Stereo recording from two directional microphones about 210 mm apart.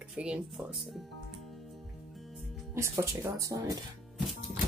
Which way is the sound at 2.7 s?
10° right (ahead or behind).